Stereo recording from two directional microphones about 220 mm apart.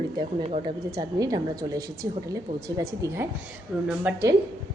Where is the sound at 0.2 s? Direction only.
25° right (ahead or behind).